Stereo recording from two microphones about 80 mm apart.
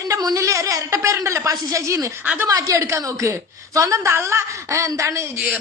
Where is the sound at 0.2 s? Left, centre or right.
Right.